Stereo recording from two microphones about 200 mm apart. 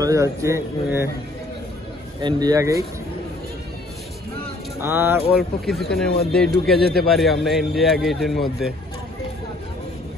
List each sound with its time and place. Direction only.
0.0 s speech: 15° right (ahead or behind)
2.2 s speech: 20° right (ahead or behind)
4.8 s speech: 10° right (ahead or behind)
5.3 s a man's voice: centre (ahead or behind)